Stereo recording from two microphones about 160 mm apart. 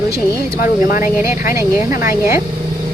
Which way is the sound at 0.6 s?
60° left (ahead or behind).